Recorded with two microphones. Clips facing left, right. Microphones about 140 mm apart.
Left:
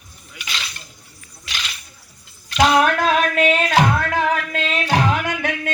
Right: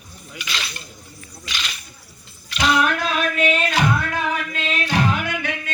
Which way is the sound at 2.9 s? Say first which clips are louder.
Left 5 dB; 90° left.